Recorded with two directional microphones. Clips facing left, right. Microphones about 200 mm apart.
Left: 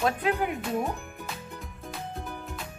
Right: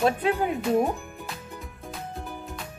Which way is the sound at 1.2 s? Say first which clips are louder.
Right 1 dB; centre (ahead or behind).